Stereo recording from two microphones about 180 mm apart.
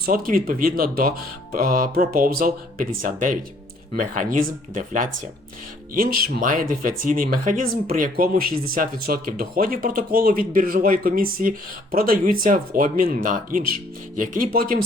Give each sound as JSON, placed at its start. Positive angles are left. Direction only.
{"t": 0.0, "sound": "speech", "side_deg": -50}